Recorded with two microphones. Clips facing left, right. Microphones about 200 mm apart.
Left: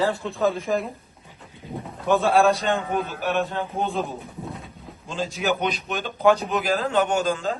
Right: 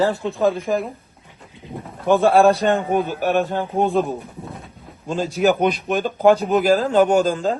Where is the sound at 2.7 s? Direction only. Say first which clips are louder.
Right 6 dB; 55° right (ahead or behind).